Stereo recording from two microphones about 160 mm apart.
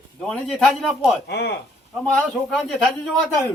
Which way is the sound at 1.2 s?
90° left.